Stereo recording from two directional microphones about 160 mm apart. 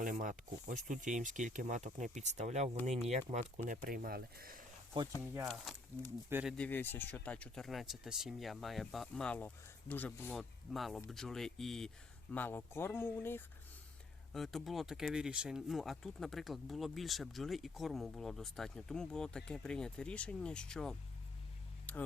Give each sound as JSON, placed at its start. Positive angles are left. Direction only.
{"t": 0.0, "sound": "speech", "side_deg": -55}
{"t": 3.8, "sound": "speech", "side_deg": -65}
{"t": 6.2, "sound": "speech", "side_deg": -15}
{"t": 6.6, "sound": "speech", "side_deg": 10}
{"t": 10.3, "sound": "speech", "side_deg": 0}
{"t": 14.3, "sound": "speech", "side_deg": 0}
{"t": 21.9, "sound": "a sound", "side_deg": 10}